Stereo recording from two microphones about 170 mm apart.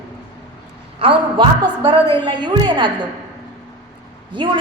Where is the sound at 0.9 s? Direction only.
30° right (ahead or behind).